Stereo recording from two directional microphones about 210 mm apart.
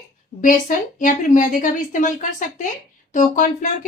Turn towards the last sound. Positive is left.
turn(degrees=35)  # may be behind; listen again after turning